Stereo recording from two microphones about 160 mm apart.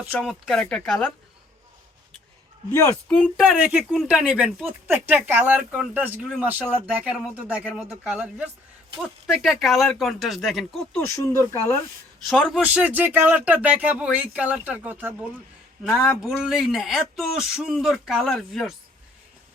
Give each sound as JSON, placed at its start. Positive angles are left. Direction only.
{"t": 0.1, "sound": "speech", "side_deg": 5}
{"t": 2.7, "sound": "speech", "side_deg": 10}
{"t": 3.4, "sound": "speech", "side_deg": -5}
{"t": 11.0, "sound": "speech", "side_deg": 15}
{"t": 12.3, "sound": "speech", "side_deg": 0}
{"t": 15.8, "sound": "speech", "side_deg": 0}